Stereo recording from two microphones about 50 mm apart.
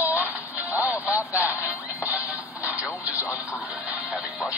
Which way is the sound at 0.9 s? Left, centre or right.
Right.